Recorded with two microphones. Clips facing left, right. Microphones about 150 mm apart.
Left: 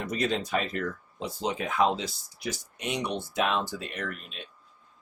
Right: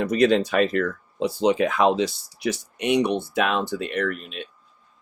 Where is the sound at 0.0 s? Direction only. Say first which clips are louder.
Right 10 dB; 75° right (ahead or behind).